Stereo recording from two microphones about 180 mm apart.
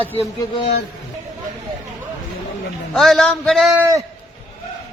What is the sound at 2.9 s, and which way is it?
Speech, centre (ahead or behind).